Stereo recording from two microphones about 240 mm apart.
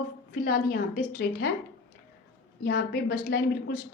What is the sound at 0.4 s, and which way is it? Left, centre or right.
Speech, left.